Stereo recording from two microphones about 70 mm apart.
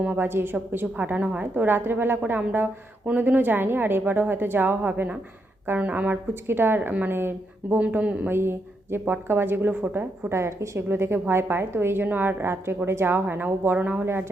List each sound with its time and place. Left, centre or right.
0.2 s a woman's voice: right
7.8 s a woman's voice: right
8.3 s a woman's voice: right
10.3 s a woman's voice: right
14.0 s a woman's voice: right